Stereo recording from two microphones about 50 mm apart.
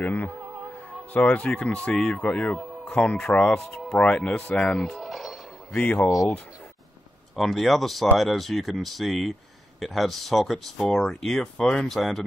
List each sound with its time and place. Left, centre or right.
0.0 s speech: left; by 4.7 s centre
4.7 s speech: centre
7.3 s speech: centre